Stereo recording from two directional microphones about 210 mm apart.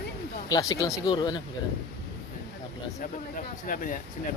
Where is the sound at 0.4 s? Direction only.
20° left (ahead or behind).